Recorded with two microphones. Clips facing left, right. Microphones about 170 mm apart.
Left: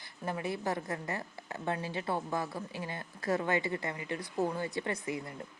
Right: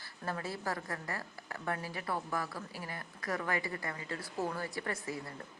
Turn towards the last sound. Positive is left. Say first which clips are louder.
# left 3 dB
turn(degrees=20)  # may be behind; listen again after turning